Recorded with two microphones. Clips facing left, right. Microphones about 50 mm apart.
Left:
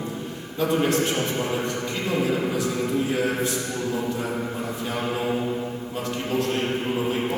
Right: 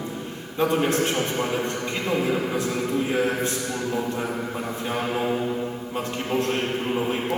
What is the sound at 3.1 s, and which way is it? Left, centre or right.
Speech, right.